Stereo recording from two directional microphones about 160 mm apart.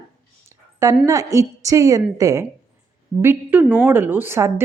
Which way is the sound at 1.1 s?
20° right (ahead or behind).